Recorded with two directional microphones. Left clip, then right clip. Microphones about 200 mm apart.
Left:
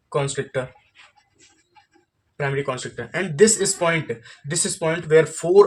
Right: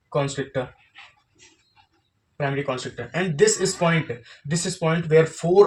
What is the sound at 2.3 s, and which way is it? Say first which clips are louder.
Speech: left 1 dB; 50° left (ahead or behind).